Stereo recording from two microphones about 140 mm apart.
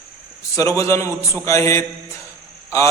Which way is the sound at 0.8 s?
20° left (ahead or behind).